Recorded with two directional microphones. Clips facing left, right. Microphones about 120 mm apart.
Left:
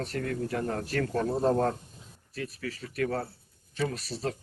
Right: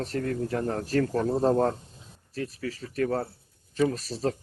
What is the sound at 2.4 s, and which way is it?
Speech, 30° right (ahead or behind).